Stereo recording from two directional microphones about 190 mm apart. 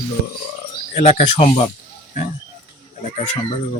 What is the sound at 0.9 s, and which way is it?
Speech, 30° left (ahead or behind).